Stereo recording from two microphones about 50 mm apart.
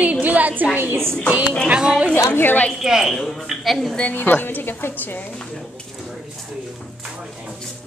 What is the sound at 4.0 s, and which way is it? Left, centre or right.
A woman's voice, left.